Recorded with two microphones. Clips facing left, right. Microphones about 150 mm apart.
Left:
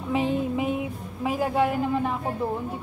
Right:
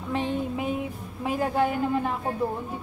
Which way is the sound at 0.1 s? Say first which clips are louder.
Left 3 dB; 5° left (ahead or behind).